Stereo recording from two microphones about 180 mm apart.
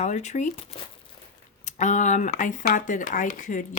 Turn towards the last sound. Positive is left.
turn(degrees=45)  # may be behind; listen again after turning